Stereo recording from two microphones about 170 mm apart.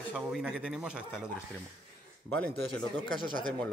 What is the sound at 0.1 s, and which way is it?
A man's voice, 5° right (ahead or behind).